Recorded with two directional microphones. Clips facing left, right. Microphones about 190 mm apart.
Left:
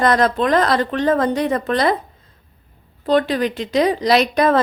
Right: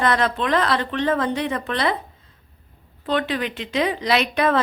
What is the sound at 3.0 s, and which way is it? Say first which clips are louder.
A woman's voice: left 6 dB; 40° left (ahead or behind).